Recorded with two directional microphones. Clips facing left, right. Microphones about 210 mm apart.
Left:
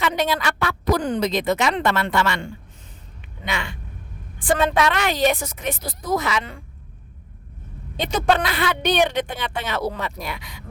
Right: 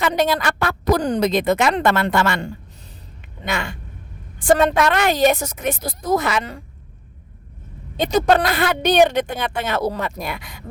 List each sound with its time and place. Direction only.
0.0 s a woman's voice: 45° right (ahead or behind)
7.9 s a woman's voice: 40° right (ahead or behind)